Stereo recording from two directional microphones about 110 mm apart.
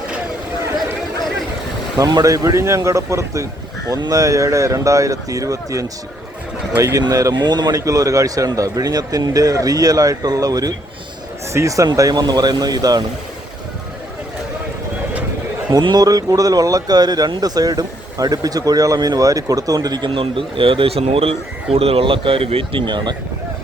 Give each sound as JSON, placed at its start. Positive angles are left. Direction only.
{"t": 2.0, "sound": "speech", "side_deg": -35}
{"t": 15.7, "sound": "speech", "side_deg": -40}